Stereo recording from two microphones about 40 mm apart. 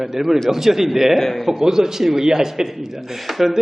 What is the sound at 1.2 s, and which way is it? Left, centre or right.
Speech, centre.